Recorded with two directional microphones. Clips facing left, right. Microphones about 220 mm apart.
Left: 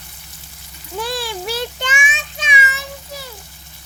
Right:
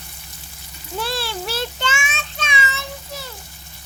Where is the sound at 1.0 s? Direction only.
15° left (ahead or behind).